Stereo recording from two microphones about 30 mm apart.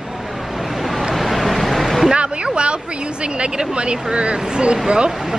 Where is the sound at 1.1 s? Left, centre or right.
Centre.